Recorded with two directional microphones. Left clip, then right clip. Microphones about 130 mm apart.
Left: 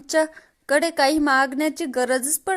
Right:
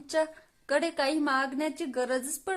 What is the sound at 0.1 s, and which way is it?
A woman's voice, 40° left (ahead or behind).